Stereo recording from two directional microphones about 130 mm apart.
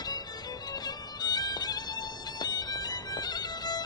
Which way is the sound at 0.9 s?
30° left (ahead or behind).